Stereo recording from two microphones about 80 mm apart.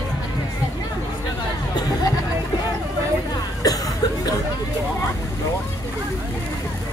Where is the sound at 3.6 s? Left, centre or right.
Left.